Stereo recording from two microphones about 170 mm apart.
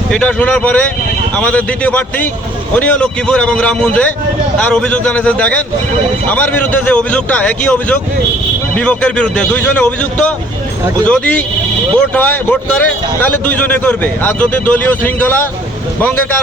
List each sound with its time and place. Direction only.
0.1 s a man's voice: 5° left (ahead or behind)